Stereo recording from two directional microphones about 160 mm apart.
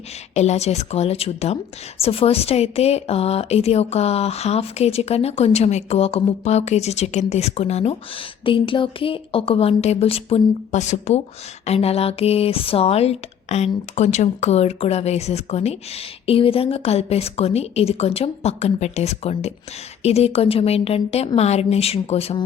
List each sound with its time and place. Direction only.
0.3 s speech: 45° left (ahead or behind)